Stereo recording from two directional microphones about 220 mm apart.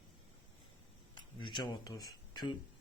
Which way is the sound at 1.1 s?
20° left (ahead or behind).